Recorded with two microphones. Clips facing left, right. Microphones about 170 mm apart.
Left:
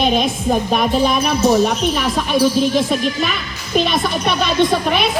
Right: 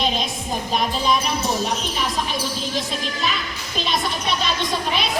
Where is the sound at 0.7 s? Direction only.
60° left (ahead or behind).